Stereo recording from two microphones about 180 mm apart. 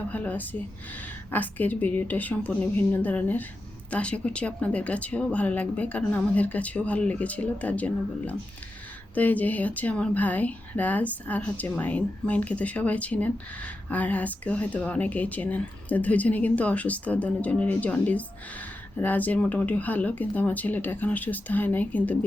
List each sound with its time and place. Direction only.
0.1 s speech: 10° left (ahead or behind)